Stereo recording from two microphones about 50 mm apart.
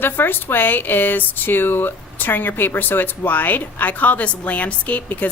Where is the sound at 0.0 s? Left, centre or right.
Left.